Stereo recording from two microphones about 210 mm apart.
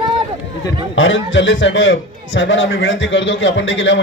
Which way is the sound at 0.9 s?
65° left (ahead or behind).